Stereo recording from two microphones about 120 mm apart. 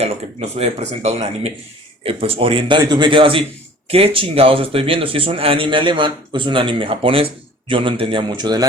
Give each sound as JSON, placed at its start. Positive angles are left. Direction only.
{"t": 0.0, "sound": "a man's voice", "side_deg": -60}